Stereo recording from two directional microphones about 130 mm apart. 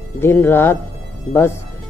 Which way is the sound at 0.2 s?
15° left (ahead or behind).